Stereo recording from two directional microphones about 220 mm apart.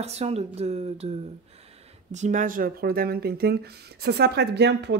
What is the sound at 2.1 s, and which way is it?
Speech, 35° right (ahead or behind).